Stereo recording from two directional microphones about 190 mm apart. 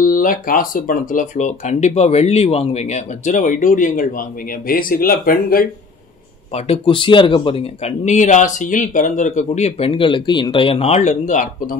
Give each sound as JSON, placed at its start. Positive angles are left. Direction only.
{"t": 0.0, "sound": "speech", "side_deg": 45}
{"t": 6.5, "sound": "speech", "side_deg": 25}